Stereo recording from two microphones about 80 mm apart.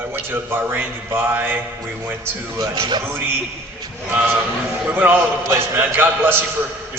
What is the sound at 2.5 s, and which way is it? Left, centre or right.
Speech, right.